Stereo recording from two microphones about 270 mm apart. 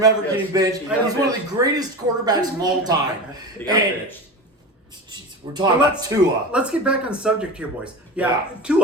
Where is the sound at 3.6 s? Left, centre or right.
Centre.